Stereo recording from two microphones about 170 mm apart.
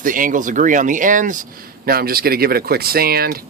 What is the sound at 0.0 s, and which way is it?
Speech, 50° right (ahead or behind).